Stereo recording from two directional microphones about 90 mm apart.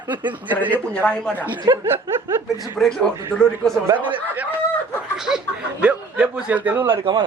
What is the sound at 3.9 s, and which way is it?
Speech, 20° right (ahead or behind).